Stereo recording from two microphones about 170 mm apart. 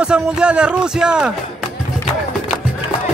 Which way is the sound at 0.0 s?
5° right (ahead or behind).